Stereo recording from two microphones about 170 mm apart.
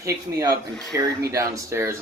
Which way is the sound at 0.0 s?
20° right (ahead or behind).